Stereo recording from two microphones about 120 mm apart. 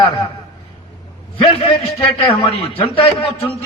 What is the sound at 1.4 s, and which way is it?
Speech, 50° left (ahead or behind).